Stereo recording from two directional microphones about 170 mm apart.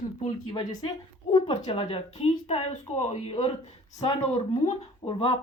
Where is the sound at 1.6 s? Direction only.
40° left (ahead or behind).